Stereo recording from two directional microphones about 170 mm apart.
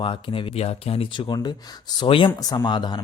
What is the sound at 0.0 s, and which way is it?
Speech, 30° left (ahead or behind).